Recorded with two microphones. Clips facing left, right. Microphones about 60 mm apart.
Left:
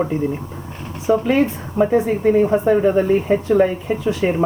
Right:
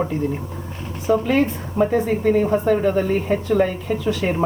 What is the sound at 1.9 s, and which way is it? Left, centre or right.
A woman's voice, centre.